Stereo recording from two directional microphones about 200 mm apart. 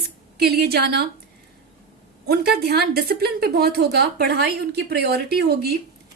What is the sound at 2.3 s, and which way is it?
A woman's voice, 50° right (ahead or behind).